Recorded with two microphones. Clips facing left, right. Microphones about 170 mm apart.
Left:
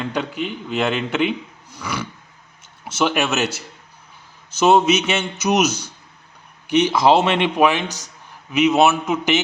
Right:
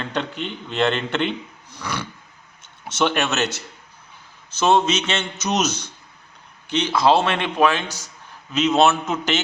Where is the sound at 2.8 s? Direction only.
5° left (ahead or behind).